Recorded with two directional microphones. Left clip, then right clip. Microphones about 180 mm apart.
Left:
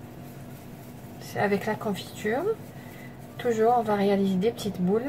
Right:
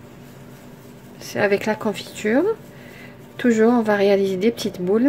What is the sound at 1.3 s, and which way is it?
Speech, 55° right (ahead or behind).